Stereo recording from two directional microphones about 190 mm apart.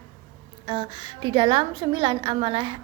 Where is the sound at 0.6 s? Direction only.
25° right (ahead or behind).